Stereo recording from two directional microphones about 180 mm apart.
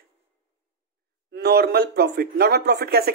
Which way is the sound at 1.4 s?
65° right (ahead or behind).